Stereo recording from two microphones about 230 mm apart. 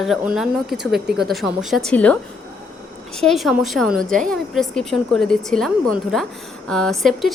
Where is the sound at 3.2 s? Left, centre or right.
Centre.